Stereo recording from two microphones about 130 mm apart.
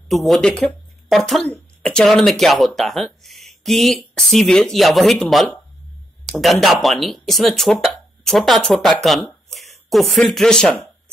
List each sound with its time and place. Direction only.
0.1 s speech: centre (ahead or behind)